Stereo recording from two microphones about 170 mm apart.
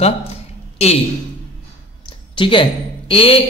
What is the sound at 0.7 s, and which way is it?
Speech, 35° left (ahead or behind).